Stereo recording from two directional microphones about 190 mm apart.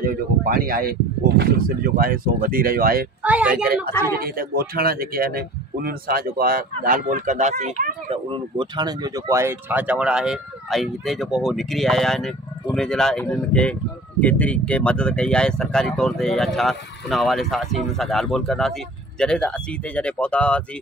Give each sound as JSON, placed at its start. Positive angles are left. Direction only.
{"t": 0.0, "sound": "speech", "side_deg": -50}
{"t": 2.0, "sound": "speech", "side_deg": -50}
{"t": 3.2, "sound": "speech", "side_deg": -5}
{"t": 4.1, "sound": "speech", "side_deg": -50}